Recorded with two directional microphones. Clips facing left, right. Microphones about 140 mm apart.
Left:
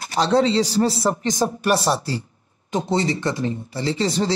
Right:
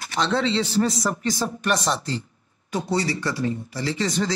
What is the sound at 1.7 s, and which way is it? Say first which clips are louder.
Speech: left 4 dB; 5° left (ahead or behind).